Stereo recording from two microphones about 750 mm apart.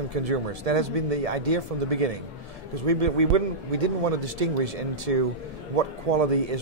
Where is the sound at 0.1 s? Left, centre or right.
Right.